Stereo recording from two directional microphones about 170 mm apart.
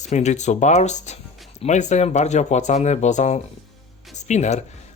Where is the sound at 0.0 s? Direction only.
45° left (ahead or behind).